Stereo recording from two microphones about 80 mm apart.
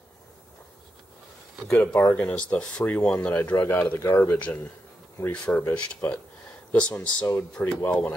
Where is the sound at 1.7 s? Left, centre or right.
Centre.